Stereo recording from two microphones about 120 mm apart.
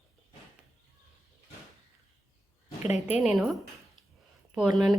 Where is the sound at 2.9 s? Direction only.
70° left (ahead or behind).